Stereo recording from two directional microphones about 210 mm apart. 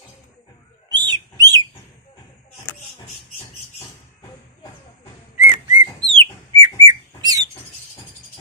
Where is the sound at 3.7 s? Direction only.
15° left (ahead or behind).